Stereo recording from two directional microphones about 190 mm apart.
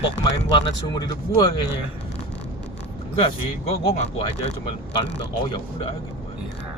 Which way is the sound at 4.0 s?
30° left (ahead or behind).